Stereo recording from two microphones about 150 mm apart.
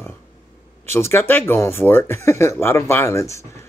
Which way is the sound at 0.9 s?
15° left (ahead or behind).